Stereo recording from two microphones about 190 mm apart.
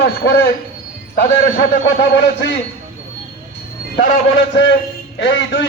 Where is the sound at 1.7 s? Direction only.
65° left (ahead or behind).